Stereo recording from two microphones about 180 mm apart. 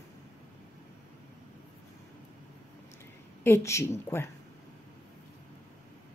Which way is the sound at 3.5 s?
15° left (ahead or behind).